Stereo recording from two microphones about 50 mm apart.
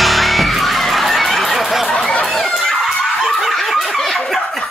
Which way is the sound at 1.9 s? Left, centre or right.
Centre.